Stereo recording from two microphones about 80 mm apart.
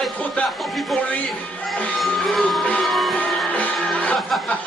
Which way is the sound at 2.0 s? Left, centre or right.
Centre.